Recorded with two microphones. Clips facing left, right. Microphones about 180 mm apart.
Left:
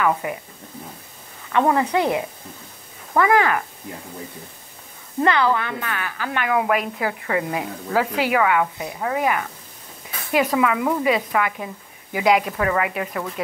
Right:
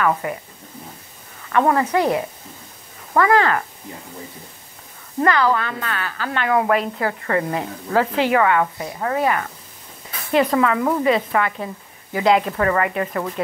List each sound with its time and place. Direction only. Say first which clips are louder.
0.0 s a woman's voice: right 1 dB; 15° left (ahead or behind)
1.7 s a woman's voice: right 1 dB; 15° left (ahead or behind)
3.2 s a woman's voice: right 1 dB; 15° left (ahead or behind)
5.2 s a woman's voice: right 1 dB; 20° left (ahead or behind)